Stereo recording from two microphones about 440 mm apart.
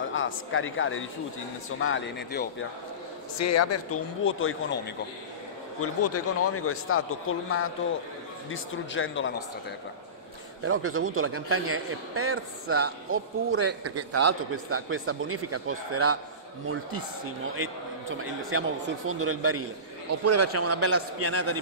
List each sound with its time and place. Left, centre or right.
0.1 s a man's voice: left
3.3 s a man's voice: left
10.6 s a man's voice: right
18.1 s a man's voice: right